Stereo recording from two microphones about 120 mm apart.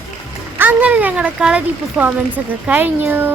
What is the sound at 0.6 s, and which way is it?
Speech, 15° right (ahead or behind).